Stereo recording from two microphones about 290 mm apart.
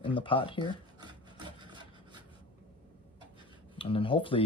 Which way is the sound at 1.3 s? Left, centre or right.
Centre.